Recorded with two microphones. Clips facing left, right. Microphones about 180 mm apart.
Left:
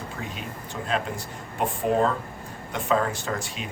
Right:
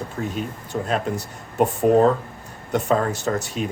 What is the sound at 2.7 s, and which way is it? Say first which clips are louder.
Speech: right 4 dB; 40° right (ahead or behind).